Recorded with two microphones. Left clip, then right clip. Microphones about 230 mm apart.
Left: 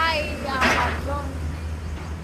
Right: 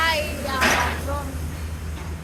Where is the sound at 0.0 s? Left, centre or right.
Centre.